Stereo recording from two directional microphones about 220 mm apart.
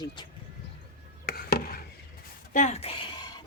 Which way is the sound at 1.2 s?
40° left (ahead or behind).